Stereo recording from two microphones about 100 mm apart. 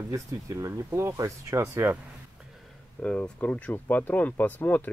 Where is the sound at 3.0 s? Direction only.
10° left (ahead or behind).